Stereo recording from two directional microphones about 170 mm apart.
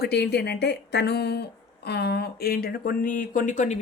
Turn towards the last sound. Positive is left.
turn(degrees=45)  # may be behind; listen again after turning